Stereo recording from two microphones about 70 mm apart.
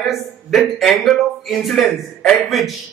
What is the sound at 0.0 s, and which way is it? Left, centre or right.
A man's voice, centre.